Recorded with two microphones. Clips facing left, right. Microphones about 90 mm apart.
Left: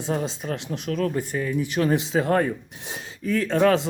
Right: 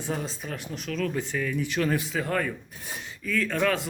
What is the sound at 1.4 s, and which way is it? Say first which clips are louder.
Speech: left 3 dB; 20° left (ahead or behind).